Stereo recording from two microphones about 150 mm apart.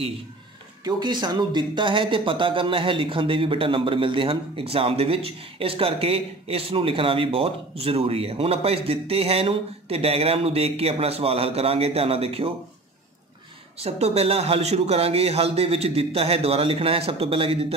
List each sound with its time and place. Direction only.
0.8 s speech: 30° right (ahead or behind)
13.7 s speech: 45° right (ahead or behind)